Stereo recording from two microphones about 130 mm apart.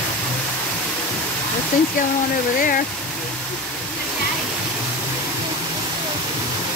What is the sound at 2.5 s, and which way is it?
Speech, 90° left.